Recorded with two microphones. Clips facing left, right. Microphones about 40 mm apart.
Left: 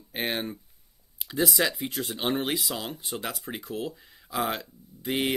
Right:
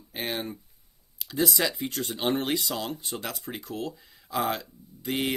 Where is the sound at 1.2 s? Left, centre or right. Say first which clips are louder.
Left 1 dB; centre.